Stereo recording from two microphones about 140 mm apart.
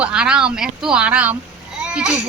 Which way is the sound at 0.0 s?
10° right (ahead or behind).